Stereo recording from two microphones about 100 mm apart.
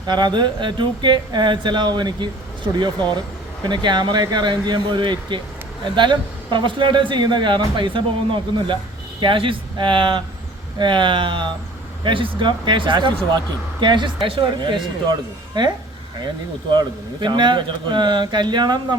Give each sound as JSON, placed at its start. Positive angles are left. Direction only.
{"t": 0.1, "sound": "a man's voice", "side_deg": -50}
{"t": 16.7, "sound": "a man's voice", "side_deg": -50}